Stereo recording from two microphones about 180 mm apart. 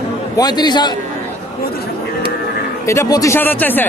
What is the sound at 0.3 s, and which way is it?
Speech, 25° left (ahead or behind).